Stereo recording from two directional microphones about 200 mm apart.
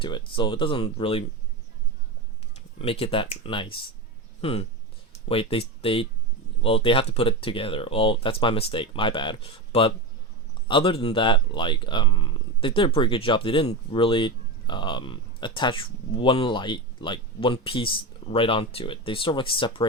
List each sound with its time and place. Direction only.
0.0 s speech: 25° left (ahead or behind)
2.7 s speech: 30° left (ahead or behind)